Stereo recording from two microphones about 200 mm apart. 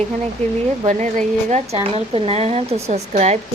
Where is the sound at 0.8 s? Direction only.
35° right (ahead or behind).